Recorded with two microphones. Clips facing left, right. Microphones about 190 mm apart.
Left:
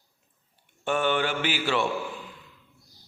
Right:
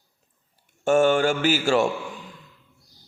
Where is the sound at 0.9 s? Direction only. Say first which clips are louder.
Right 7 dB; 45° right (ahead or behind).